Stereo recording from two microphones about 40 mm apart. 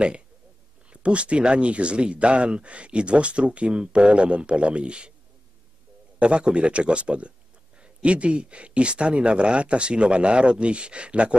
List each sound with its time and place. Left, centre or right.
1.0 s speech: right
6.1 s speech: right